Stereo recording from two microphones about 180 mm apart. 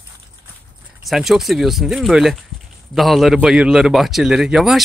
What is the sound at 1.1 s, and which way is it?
A man's voice, centre (ahead or behind).